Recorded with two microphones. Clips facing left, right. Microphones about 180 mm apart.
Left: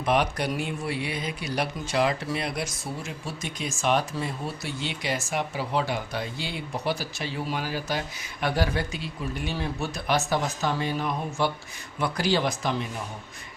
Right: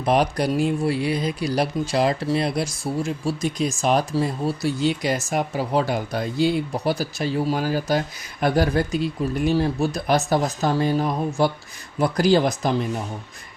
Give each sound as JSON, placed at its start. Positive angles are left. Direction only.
{"t": 0.0, "sound": "speech", "side_deg": -35}